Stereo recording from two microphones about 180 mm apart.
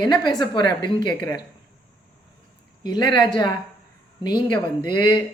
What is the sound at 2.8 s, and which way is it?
A woman's voice, 25° left (ahead or behind).